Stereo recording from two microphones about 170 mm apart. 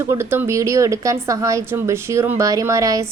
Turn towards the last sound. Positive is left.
turn(degrees=-20)  # may be behind; listen again after turning